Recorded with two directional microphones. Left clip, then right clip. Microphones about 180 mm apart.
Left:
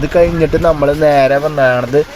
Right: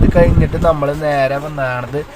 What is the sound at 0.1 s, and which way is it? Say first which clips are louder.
Speech: left 6 dB; 35° left (ahead or behind).